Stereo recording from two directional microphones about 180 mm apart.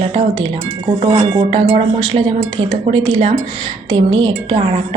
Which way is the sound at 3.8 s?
25° right (ahead or behind).